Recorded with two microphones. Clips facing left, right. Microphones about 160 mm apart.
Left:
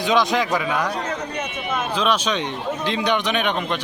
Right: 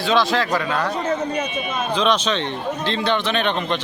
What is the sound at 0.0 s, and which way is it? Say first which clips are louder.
Speech: even; 15° left (ahead or behind).